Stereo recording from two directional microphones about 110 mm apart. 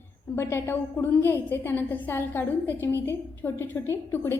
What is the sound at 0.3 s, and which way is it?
A woman's voice, 20° left (ahead or behind).